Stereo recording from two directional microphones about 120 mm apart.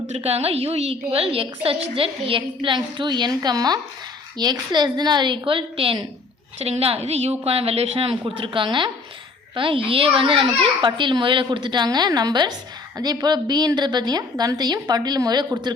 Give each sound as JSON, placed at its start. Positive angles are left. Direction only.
{"t": 0.1, "sound": "a woman's voice", "side_deg": -55}